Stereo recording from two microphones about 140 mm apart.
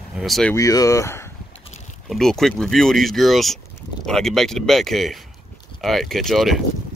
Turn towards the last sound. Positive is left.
turn(degrees=0)  # may be behind; listen again after turning